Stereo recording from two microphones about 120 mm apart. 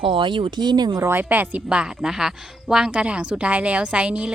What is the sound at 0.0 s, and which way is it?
Speech, 45° right (ahead or behind).